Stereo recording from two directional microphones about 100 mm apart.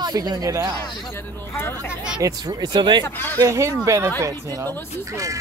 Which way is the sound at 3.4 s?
30° right (ahead or behind).